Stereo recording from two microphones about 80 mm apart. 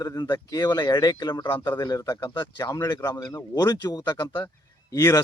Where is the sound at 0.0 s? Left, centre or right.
Left.